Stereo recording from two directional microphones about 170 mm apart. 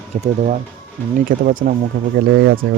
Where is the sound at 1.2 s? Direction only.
50° right (ahead or behind).